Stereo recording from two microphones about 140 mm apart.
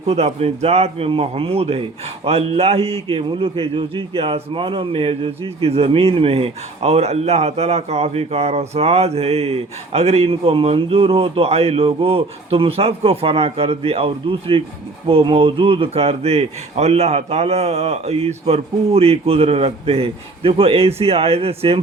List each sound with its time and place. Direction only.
0.0 s a man's voice: 50° right (ahead or behind)